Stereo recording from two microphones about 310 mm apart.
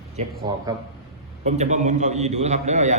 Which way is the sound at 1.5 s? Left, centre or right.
Right.